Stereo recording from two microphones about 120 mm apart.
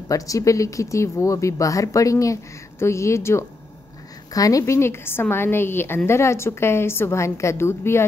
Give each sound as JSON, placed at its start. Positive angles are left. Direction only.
{"t": 0.1, "sound": "a woman's voice", "side_deg": 25}